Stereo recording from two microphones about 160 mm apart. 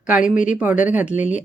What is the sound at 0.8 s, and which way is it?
Speech, 10° right (ahead or behind).